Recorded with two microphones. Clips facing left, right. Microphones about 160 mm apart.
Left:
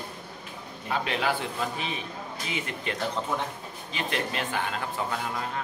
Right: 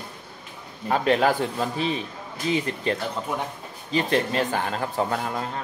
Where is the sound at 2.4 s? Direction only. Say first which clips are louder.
Right 10 dB; 35° right (ahead or behind).